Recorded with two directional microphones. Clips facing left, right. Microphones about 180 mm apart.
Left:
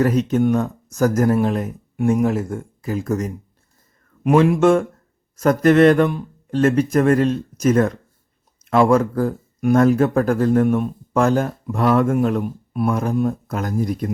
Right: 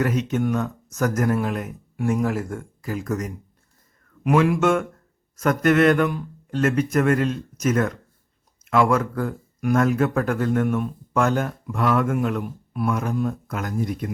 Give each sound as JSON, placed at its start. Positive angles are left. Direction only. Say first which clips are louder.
{"t": 0.0, "sound": "speech", "louder": "left 5 dB", "side_deg": 35}